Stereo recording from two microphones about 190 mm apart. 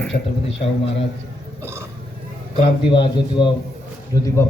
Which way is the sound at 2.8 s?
25° left (ahead or behind).